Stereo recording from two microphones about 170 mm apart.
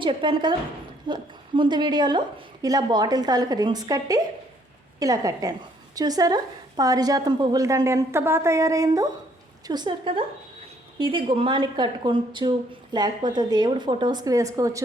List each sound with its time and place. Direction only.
0.0 s a woman's voice: 30° right (ahead or behind)